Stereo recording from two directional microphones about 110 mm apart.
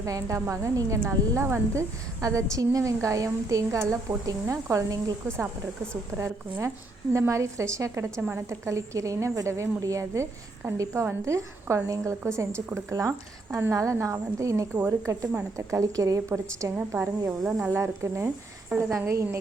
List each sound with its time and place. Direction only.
0.0 s a woman's voice: 30° right (ahead or behind)
6.1 s a woman's voice: 25° right (ahead or behind)